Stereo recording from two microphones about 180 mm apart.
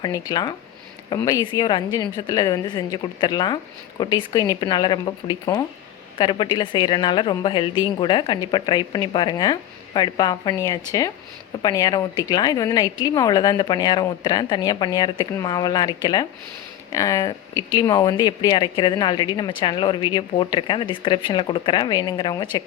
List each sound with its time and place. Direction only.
0.0 s speech: 20° left (ahead or behind)